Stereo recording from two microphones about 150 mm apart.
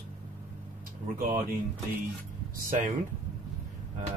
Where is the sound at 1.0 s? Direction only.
70° right (ahead or behind).